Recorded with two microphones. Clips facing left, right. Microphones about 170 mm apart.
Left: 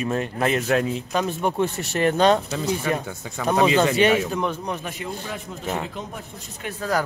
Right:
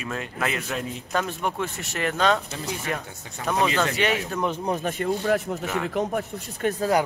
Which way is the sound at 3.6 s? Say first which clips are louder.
Left 6 dB; 20° left (ahead or behind).